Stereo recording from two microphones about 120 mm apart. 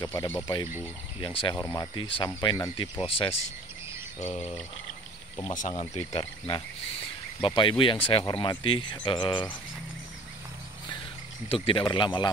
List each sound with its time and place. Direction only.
0.0 s speech: 30° left (ahead or behind)
1.2 s speech: 45° left (ahead or behind)
1.6 s speech: 25° left (ahead or behind)
2.0 s speech: 45° left (ahead or behind)
2.2 s speech: 30° left (ahead or behind)
2.8 s speech: 45° left (ahead or behind)
4.2 s a sound: 60° left (ahead or behind)
5.5 s speech: 90° left; by 6.2 s 70° left (ahead or behind)
7.4 s speech: 45° left (ahead or behind)
11.4 s speech: 50° left (ahead or behind)